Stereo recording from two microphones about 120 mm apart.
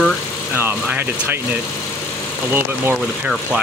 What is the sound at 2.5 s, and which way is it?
Speech, 20° right (ahead or behind).